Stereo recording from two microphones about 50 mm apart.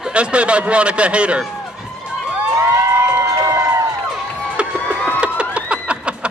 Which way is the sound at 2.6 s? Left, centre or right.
Right.